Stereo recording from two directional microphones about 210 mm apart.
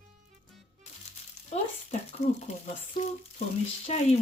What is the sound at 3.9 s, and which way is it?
Speech, 30° left (ahead or behind).